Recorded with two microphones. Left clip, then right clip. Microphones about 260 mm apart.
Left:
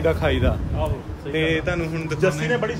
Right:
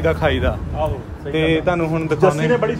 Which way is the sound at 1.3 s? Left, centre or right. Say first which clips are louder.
Right 5 dB; right.